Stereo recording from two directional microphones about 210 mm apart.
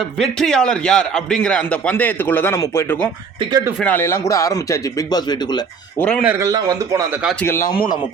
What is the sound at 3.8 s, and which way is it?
A man's voice, 10° left (ahead or behind).